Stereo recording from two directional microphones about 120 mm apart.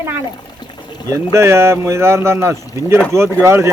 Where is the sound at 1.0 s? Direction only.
25° right (ahead or behind).